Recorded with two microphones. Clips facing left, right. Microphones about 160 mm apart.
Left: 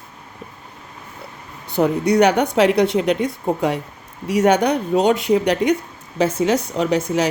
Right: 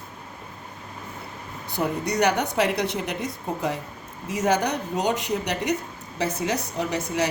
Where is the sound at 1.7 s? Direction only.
65° left (ahead or behind).